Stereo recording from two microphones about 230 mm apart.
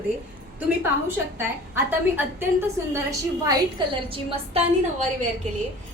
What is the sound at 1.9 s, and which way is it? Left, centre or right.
A woman's voice, centre.